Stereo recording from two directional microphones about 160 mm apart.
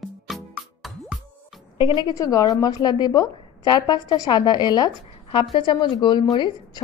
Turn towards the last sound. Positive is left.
turn(degrees=25)  # may be behind; listen again after turning